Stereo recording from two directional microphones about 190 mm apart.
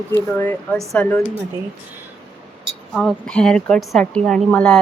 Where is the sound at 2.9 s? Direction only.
Centre (ahead or behind).